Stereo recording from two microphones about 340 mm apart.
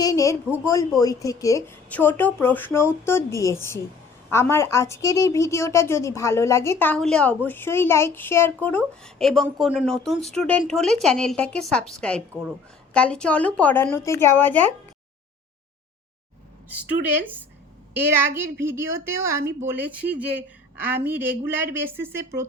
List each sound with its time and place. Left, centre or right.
0.0 s a woman's voice: centre
17.9 s speech: centre